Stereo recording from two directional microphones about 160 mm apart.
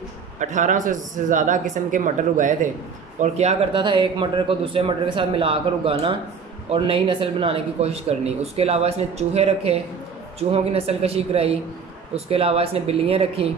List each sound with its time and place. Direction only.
0.4 s speech: 50° right (ahead or behind)
3.7 s a man's voice: 30° right (ahead or behind)